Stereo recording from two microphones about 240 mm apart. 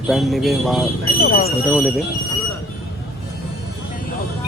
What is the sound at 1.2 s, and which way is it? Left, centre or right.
Speech, left.